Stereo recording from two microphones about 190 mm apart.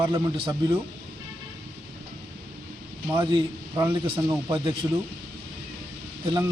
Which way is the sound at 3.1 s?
20° right (ahead or behind).